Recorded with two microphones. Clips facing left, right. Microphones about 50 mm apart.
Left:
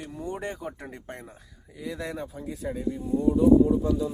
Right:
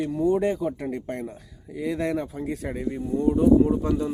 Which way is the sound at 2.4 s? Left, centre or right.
Right.